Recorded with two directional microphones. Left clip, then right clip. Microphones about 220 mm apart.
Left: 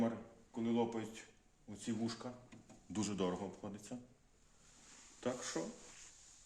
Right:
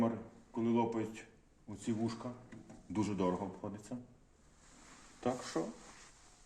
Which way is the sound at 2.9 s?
15° left (ahead or behind).